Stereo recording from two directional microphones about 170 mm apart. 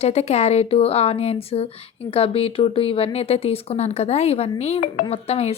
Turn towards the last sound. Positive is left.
turn(degrees=35)  # may be behind; listen again after turning